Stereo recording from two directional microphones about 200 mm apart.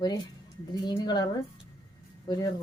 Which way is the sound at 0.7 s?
20° left (ahead or behind).